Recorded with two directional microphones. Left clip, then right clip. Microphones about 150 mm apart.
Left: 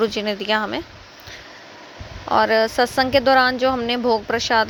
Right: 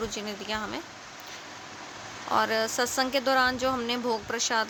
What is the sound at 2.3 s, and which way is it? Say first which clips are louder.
Speech: left 9 dB; 35° left (ahead or behind).